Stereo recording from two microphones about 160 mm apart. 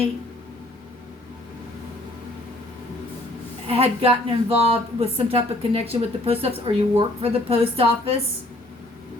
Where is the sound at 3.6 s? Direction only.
40° right (ahead or behind).